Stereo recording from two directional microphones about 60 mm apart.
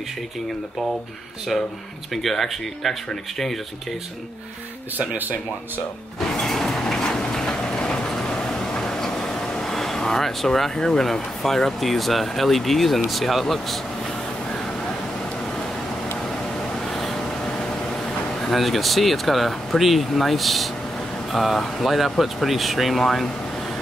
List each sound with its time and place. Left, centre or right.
1.5 s speech: centre
4.9 s speech: right
6.1 s vehicle: centre
16.8 s vehicle: centre
18.4 s speech: centre